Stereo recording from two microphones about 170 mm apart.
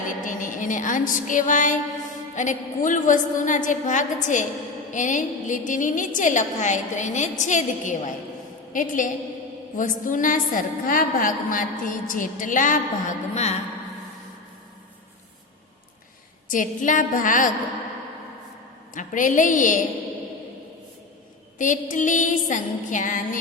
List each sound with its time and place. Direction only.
0.3 s music: 50° left (ahead or behind)
2.3 s a woman's voice: 45° left (ahead or behind)
16.5 s a woman's voice: 50° left (ahead or behind)
18.9 s a woman's voice: 50° left (ahead or behind)
21.6 s a woman's voice: 50° left (ahead or behind)